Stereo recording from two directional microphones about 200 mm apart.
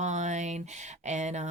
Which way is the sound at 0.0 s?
35° right (ahead or behind).